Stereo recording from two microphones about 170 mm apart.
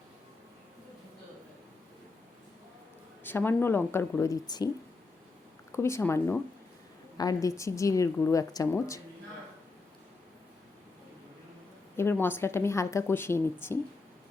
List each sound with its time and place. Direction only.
3.2 s a woman's voice: 15° left (ahead or behind)
5.7 s a woman's voice: 15° left (ahead or behind)
11.9 s a woman's voice: 15° left (ahead or behind)